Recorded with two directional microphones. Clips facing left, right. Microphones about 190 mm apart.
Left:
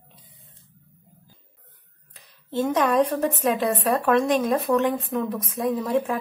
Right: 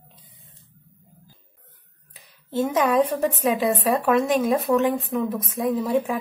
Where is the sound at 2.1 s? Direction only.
5° right (ahead or behind).